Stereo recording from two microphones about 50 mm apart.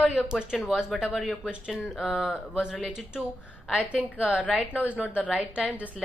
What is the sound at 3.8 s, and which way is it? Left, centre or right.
A woman's voice, right.